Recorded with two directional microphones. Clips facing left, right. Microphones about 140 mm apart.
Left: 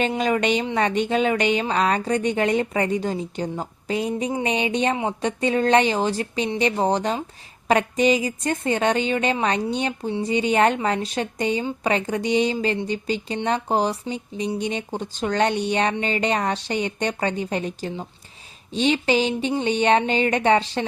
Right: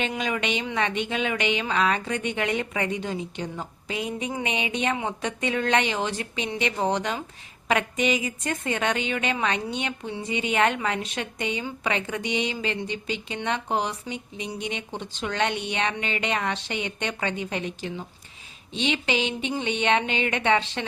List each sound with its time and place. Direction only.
0.0 s speech: 40° left (ahead or behind)